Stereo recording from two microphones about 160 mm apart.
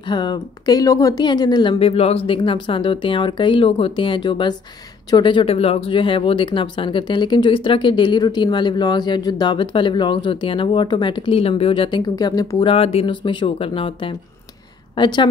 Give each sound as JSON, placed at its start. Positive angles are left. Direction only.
{"t": 0.1, "sound": "speech", "side_deg": 25}
{"t": 12.5, "sound": "speech", "side_deg": 40}